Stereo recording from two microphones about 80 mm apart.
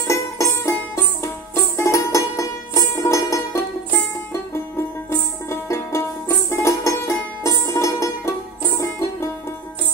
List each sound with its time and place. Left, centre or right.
0.0 s music: left
5.1 s music: left